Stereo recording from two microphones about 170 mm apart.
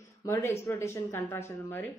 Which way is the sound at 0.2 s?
15° left (ahead or behind).